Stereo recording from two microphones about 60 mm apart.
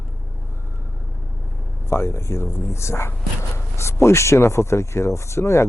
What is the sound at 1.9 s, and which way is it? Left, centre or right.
Speech, left.